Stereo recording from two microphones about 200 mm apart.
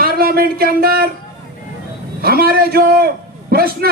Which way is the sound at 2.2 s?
50° right (ahead or behind).